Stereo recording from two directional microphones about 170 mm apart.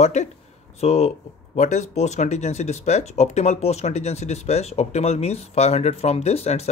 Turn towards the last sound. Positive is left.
turn(degrees=35)  # may be behind; listen again after turning